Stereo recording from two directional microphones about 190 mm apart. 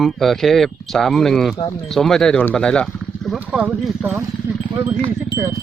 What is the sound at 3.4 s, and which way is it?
Speech, 10° right (ahead or behind).